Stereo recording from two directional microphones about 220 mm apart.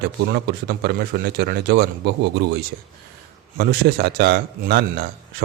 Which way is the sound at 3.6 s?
45° right (ahead or behind).